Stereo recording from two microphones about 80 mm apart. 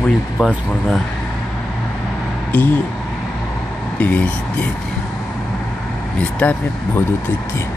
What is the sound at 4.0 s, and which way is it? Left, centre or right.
Speech, left.